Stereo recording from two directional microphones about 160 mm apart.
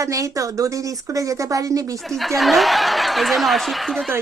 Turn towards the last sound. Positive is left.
turn(degrees=0)  # may be behind; listen again after turning